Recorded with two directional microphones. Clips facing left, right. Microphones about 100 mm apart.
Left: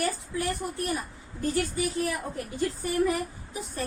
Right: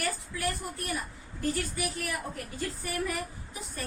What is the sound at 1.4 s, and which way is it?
A woman's voice, 25° left (ahead or behind).